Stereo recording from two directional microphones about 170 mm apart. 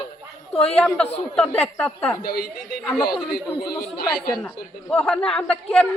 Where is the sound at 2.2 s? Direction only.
65° left (ahead or behind).